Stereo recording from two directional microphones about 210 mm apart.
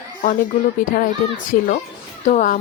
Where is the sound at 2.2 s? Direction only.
40° left (ahead or behind).